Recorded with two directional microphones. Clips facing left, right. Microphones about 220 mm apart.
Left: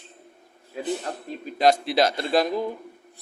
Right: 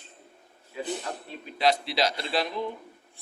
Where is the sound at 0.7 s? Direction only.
45° left (ahead or behind).